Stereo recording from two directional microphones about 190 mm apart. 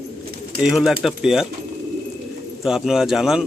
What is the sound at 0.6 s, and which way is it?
Speech, centre (ahead or behind).